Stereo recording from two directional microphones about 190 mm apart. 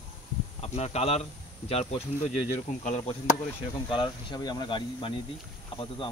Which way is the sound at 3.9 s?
25° left (ahead or behind).